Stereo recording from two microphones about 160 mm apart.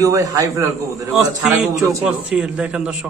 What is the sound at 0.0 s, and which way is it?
A man's voice, 20° right (ahead or behind).